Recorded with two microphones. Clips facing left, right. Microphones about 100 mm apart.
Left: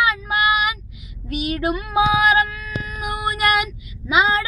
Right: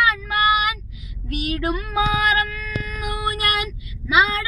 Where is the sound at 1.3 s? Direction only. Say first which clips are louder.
Left 2 dB; 15° left (ahead or behind).